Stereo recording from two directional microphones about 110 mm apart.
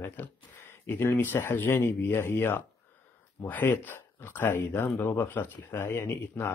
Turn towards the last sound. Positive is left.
turn(degrees=20)  # may be behind; listen again after turning